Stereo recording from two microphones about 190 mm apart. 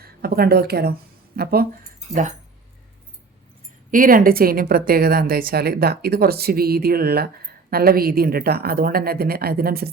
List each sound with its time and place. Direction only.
0.2 s a woman's voice: 55° right (ahead or behind)
3.9 s a woman's voice: 45° right (ahead or behind)